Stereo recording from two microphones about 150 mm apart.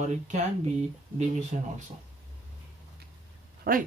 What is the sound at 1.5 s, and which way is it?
Speech, 55° right (ahead or behind).